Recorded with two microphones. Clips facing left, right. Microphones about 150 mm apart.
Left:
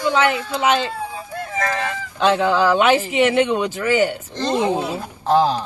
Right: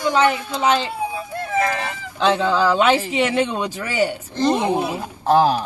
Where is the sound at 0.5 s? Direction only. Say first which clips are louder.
Left 1 dB; 10° left (ahead or behind).